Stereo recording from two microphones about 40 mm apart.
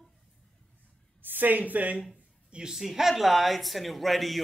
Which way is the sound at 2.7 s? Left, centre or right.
Centre.